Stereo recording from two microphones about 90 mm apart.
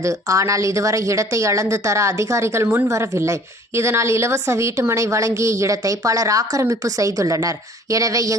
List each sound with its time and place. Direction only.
0.0 s a woman's voice: 35° right (ahead or behind)